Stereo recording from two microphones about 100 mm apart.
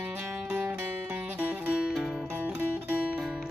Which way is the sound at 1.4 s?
15° right (ahead or behind).